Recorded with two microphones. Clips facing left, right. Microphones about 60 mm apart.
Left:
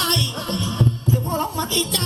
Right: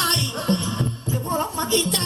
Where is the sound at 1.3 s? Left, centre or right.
Right.